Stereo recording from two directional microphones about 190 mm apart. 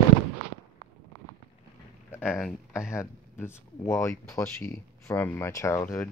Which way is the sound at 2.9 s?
10° left (ahead or behind).